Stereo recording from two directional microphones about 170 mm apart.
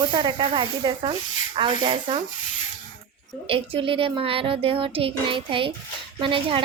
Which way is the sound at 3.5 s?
30° right (ahead or behind).